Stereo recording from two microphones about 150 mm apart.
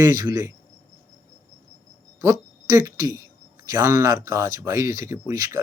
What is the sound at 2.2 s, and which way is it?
Speech, 20° right (ahead or behind).